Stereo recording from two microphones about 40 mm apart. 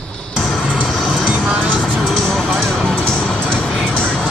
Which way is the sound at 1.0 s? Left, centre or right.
Centre.